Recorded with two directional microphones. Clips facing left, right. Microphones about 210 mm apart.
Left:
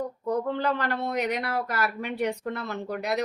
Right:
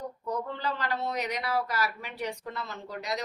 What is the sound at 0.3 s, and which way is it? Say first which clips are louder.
Speech: left 7 dB; 55° left (ahead or behind).